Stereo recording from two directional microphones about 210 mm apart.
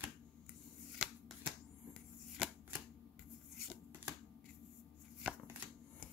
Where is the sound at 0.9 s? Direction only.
5° right (ahead or behind).